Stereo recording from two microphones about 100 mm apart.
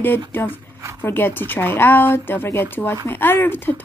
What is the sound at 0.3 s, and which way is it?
Speech, 20° left (ahead or behind).